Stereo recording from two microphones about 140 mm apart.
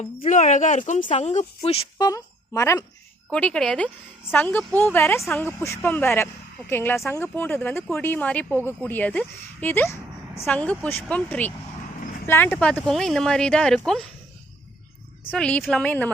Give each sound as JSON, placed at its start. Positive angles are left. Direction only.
{"t": 0.3, "sound": "speech", "side_deg": 60}
{"t": 2.0, "sound": "a woman's voice", "side_deg": 25}
{"t": 3.3, "sound": "speech", "side_deg": 5}
{"t": 15.3, "sound": "speech", "side_deg": 10}